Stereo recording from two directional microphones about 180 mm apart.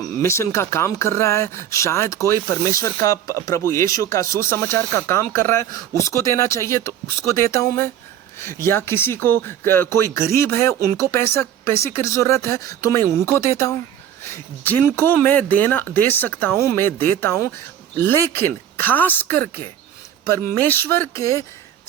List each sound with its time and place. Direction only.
0.0 s speech: 15° left (ahead or behind)